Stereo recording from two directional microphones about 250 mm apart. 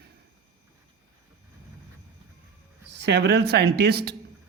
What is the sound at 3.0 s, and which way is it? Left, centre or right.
Speech, right.